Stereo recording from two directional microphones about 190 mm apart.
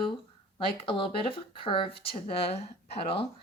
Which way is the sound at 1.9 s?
55° left (ahead or behind).